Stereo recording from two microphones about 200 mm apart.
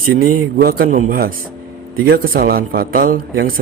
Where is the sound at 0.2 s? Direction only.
45° right (ahead or behind).